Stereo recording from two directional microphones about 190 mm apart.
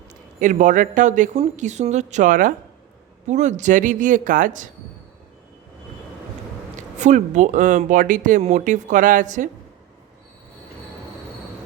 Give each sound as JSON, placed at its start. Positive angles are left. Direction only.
{"t": 0.3, "sound": "speech", "side_deg": -40}
{"t": 7.0, "sound": "speech", "side_deg": -40}